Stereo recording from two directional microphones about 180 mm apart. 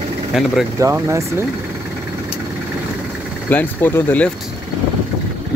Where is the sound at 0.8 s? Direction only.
15° right (ahead or behind).